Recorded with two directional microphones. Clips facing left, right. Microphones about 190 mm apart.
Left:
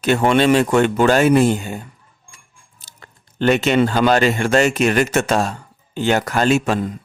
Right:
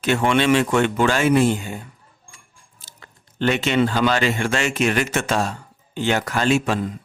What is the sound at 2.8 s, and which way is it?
Speech, 45° left (ahead or behind).